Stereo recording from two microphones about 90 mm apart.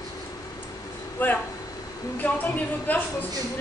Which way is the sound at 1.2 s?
20° left (ahead or behind).